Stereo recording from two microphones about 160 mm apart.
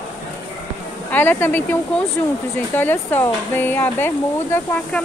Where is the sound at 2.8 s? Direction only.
10° left (ahead or behind).